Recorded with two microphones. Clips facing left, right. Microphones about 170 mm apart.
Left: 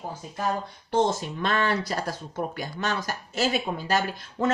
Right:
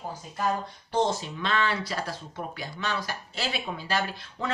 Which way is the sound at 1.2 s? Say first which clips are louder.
Left 2 dB; 45° left (ahead or behind).